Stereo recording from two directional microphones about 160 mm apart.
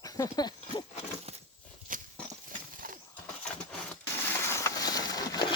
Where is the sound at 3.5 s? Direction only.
10° left (ahead or behind).